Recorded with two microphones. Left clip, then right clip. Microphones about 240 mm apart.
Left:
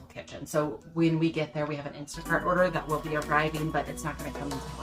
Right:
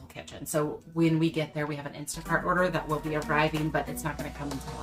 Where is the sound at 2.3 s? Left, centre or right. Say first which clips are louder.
Left 1 dB; centre.